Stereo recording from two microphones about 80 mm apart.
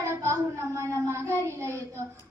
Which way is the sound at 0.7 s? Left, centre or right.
Right.